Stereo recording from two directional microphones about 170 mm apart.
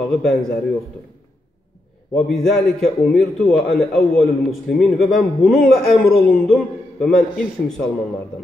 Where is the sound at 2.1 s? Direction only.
Centre (ahead or behind).